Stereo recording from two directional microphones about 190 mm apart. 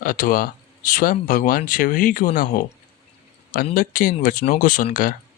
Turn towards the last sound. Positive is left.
turn(degrees=45)  # may be behind; listen again after turning